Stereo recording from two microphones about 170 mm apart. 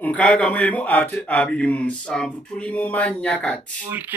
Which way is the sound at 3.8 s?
10° right (ahead or behind).